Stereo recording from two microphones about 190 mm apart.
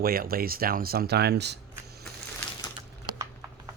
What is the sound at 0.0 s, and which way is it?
Speech, 50° right (ahead or behind).